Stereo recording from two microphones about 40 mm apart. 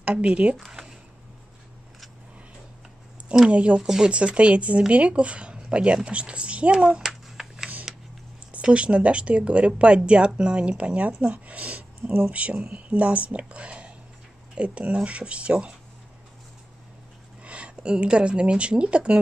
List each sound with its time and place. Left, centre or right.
0.0 s speech: right
0.7 s a sound: centre
3.4 s speech: right
3.8 s speech: centre
4.1 s speech: right
7.1 s a sound: centre
8.6 s speech: right
17.4 s speech: right